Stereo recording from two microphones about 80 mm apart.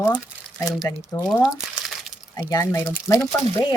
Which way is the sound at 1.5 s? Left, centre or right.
Centre.